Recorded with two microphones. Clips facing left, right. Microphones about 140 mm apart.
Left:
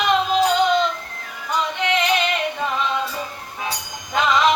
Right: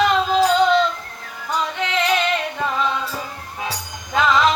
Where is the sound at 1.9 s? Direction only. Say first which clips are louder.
Right 1 dB; 20° left (ahead or behind).